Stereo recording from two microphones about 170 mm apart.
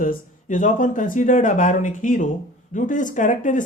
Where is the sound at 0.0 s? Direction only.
50° left (ahead or behind).